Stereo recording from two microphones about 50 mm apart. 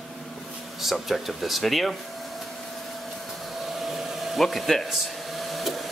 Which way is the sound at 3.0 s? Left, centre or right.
Centre.